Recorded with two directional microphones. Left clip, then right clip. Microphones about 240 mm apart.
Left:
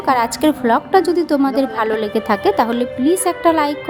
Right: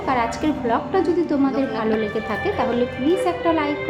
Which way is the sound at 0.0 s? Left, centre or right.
Left.